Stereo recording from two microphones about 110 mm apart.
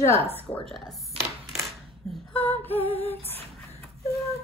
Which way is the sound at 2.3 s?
15° left (ahead or behind).